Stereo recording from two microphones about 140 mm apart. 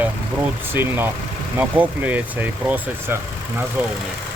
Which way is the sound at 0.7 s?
15° right (ahead or behind).